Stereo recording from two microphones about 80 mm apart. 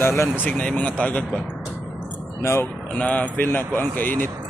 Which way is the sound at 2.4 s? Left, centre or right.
Left.